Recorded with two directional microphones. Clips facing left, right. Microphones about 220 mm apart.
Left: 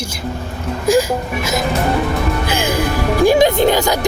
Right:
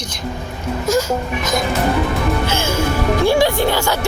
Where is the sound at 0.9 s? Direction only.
15° left (ahead or behind).